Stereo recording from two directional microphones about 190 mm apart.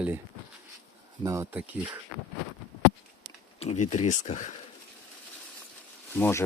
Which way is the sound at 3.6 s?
35° left (ahead or behind).